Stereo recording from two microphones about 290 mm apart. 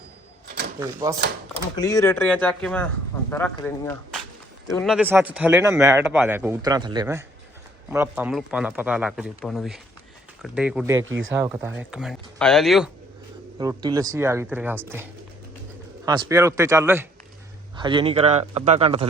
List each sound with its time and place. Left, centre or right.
0.8 s speech: centre
1.7 s speech: centre
11.0 s speech: right
11.3 s speech: centre
13.6 s speech: centre
16.0 s speech: centre